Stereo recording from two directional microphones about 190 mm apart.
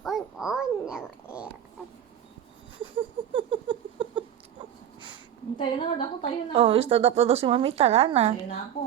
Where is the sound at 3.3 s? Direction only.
25° right (ahead or behind).